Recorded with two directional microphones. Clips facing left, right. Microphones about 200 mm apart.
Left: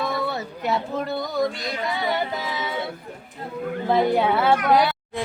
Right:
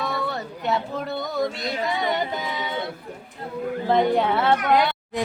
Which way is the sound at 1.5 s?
25° right (ahead or behind).